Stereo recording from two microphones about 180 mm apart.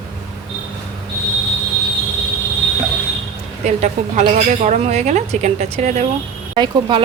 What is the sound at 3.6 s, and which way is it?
Speech, 40° right (ahead or behind).